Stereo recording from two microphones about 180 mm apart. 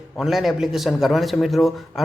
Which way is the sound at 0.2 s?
Centre (ahead or behind).